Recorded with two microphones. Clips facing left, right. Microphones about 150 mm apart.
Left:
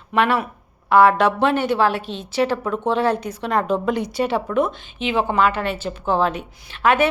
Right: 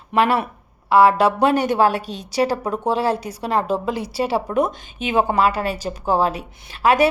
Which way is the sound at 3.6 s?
5° right (ahead or behind).